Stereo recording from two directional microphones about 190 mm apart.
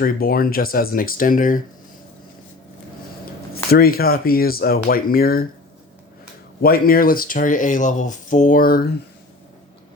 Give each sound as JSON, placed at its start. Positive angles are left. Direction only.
{"t": 0.0, "sound": "speech", "side_deg": 50}
{"t": 3.5, "sound": "speech", "side_deg": 55}
{"t": 6.6, "sound": "speech", "side_deg": 55}